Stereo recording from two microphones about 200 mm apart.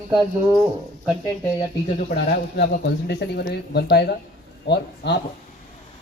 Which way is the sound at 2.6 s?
55° left (ahead or behind).